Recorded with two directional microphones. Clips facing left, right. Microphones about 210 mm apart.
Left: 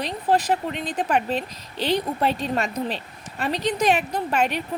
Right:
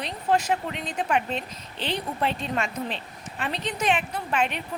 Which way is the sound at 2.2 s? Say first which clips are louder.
Left 4 dB; 40° left (ahead or behind).